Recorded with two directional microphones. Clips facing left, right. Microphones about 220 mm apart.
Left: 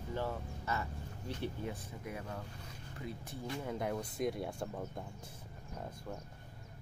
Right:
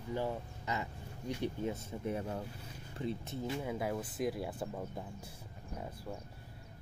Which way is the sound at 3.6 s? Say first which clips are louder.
Left 2 dB; 5° right (ahead or behind).